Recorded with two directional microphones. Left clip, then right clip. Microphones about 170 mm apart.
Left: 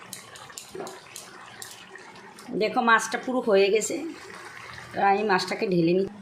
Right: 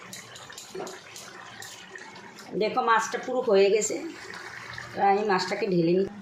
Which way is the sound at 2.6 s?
35° left (ahead or behind).